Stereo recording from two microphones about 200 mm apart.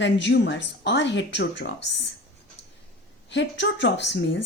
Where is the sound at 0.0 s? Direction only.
60° left (ahead or behind).